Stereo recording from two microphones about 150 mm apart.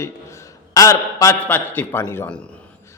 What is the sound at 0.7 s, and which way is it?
A man's voice, 20° left (ahead or behind).